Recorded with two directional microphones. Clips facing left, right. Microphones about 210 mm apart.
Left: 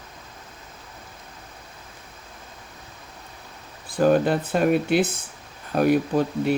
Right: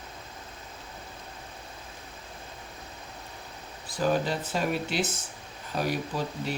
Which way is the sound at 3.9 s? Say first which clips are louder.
Left 8 dB; 55° left (ahead or behind).